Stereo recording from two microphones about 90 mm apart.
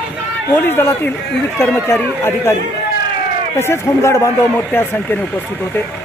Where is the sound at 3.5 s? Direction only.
30° left (ahead or behind).